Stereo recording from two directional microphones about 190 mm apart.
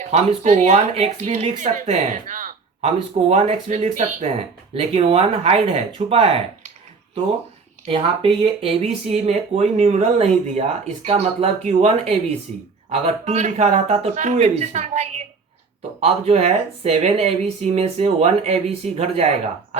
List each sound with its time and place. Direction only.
0.1 s speech: 35° right (ahead or behind)
7.9 s speech: 30° right (ahead or behind)